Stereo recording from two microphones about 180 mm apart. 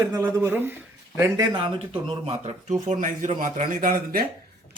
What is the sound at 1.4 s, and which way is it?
Speech, 25° right (ahead or behind).